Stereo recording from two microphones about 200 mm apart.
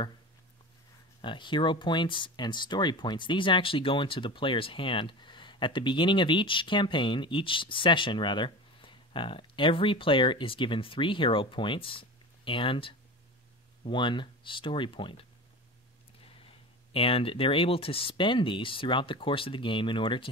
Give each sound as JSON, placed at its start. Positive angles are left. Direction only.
{"t": 1.2, "sound": "speech", "side_deg": 25}
{"t": 16.4, "sound": "speech", "side_deg": 30}